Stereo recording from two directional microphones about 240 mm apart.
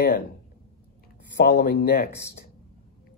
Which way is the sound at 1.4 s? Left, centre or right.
Left.